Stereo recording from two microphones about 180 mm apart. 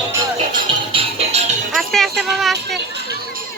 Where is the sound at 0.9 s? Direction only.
35° right (ahead or behind).